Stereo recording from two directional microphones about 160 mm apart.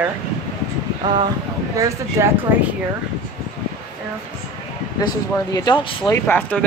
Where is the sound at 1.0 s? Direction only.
25° right (ahead or behind).